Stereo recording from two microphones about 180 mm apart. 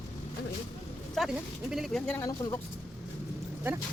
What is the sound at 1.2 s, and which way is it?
Speech, centre (ahead or behind).